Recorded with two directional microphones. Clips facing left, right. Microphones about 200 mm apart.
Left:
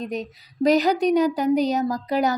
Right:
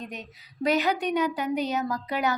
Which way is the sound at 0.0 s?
35° left (ahead or behind).